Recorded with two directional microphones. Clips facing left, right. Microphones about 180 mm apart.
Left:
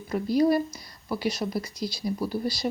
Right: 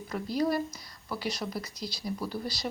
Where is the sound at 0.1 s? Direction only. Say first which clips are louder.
Left 7 dB; 15° left (ahead or behind).